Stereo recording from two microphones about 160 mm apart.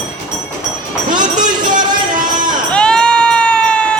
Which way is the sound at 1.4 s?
55° right (ahead or behind).